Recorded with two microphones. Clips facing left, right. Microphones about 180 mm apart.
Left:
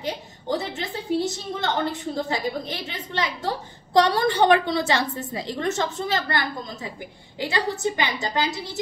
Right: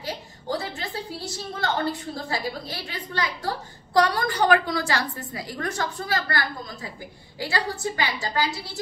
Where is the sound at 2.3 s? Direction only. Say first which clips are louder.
Left 3 dB; 20° left (ahead or behind).